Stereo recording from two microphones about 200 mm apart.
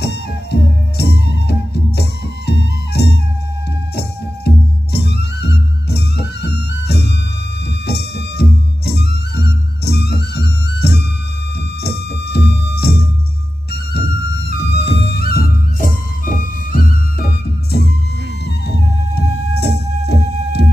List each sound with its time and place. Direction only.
0.0 s music: 55° left (ahead or behind)
4.9 s music: 55° left (ahead or behind)
19.1 s music: 55° left (ahead or behind)